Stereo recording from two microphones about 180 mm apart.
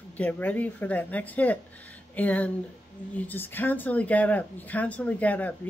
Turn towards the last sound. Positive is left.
turn(degrees=10)  # may be behind; listen again after turning